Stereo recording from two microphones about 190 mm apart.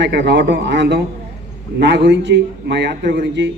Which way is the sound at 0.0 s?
65° right (ahead or behind).